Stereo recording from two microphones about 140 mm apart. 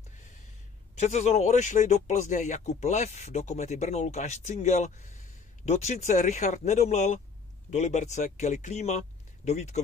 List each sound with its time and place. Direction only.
0.9 s speech: 55° left (ahead or behind)